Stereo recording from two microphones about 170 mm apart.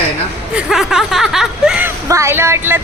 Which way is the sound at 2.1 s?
15° right (ahead or behind).